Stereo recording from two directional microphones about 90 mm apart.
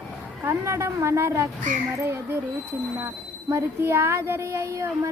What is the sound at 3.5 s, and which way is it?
Speech, 30° right (ahead or behind).